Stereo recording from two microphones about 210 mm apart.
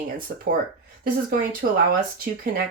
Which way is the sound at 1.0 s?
45° right (ahead or behind).